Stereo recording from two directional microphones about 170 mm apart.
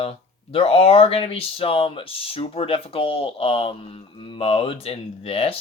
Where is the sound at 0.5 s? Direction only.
35° left (ahead or behind).